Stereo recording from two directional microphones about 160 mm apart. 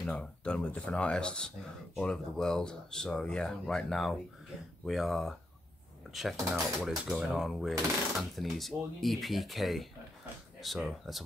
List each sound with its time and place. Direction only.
0.0 s speech: 5° left (ahead or behind)